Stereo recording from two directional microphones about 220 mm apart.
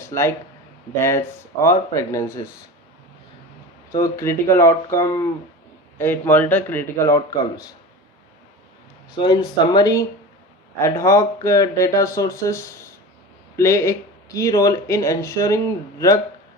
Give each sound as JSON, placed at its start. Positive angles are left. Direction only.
{"t": 0.0, "sound": "speech", "side_deg": 10}
{"t": 3.9, "sound": "speech", "side_deg": 15}
{"t": 9.1, "sound": "speech", "side_deg": 20}